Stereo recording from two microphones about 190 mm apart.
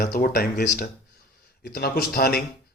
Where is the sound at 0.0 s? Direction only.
50° left (ahead or behind).